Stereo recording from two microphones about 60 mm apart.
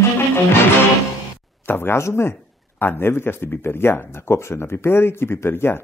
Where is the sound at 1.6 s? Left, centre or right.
Left.